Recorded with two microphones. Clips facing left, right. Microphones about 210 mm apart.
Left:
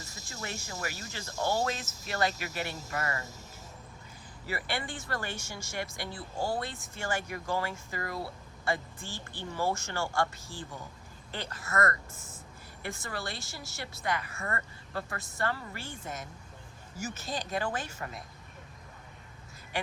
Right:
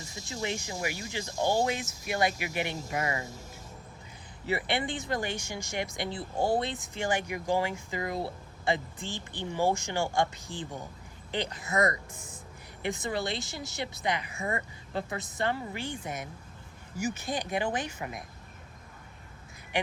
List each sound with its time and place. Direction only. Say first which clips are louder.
0.3 s speech: right 7 dB; 20° right (ahead or behind)
4.4 s speech: right 6 dB; 20° right (ahead or behind)
19.7 s speech: right 4 dB; 15° right (ahead or behind)